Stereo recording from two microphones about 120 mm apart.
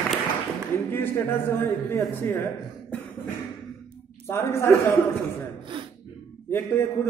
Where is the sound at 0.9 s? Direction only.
20° left (ahead or behind).